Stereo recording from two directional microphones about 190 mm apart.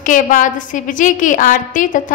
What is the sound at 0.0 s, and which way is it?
A woman's voice, 45° left (ahead or behind).